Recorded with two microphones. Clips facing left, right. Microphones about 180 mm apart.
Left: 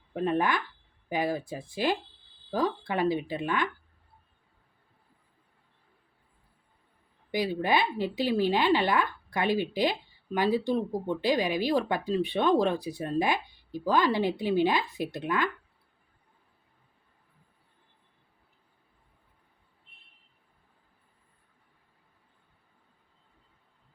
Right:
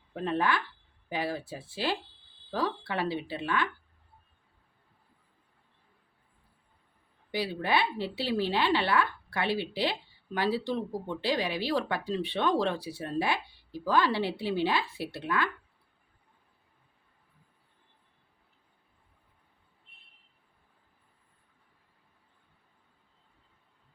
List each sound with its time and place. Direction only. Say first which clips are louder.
0.1 s a woman's voice: left 2 dB; 15° left (ahead or behind)
7.3 s a woman's voice: left 3 dB; 15° left (ahead or behind)